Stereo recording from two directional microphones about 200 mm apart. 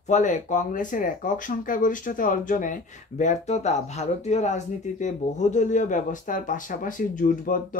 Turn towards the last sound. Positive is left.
turn(degrees=40)  # may be behind; listen again after turning